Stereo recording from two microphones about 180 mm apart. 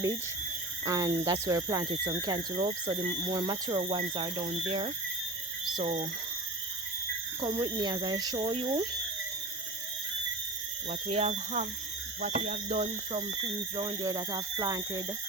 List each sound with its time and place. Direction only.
0.9 s speech: 20° right (ahead or behind); by 6.1 s 35° right (ahead or behind)
7.4 s speech: 25° right (ahead or behind)
10.8 s speech: 35° right (ahead or behind)
12.6 s speech: 30° right (ahead or behind)